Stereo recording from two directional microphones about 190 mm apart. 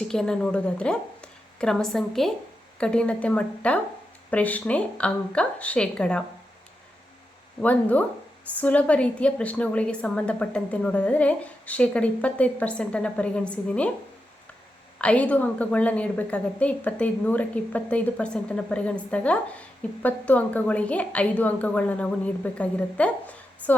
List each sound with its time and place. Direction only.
0.1 s a woman's voice: 5° left (ahead or behind)
7.6 s a woman's voice: 10° left (ahead or behind)
14.9 s a woman's voice: 5° left (ahead or behind)